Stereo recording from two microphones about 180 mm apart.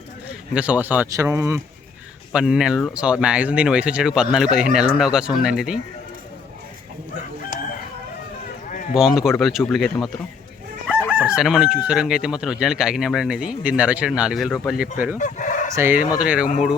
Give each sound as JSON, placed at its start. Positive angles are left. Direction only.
{"t": 0.5, "sound": "speech", "side_deg": -10}
{"t": 2.3, "sound": "speech", "side_deg": -5}
{"t": 8.9, "sound": "speech", "side_deg": 0}
{"t": 11.1, "sound": "speech", "side_deg": -5}
{"t": 15.2, "sound": "chicken", "side_deg": 45}
{"t": 15.7, "sound": "speech", "side_deg": -10}